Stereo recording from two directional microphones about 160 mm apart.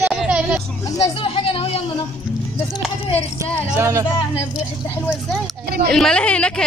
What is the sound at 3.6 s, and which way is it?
Speech, 15° right (ahead or behind).